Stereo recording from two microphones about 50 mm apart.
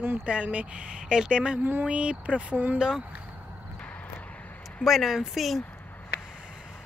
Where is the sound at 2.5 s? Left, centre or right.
Right.